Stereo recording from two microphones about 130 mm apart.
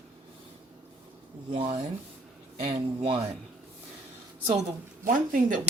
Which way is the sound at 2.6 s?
50° right (ahead or behind).